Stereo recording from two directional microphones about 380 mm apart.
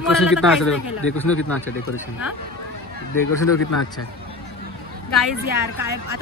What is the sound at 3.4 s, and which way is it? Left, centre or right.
Speech, left.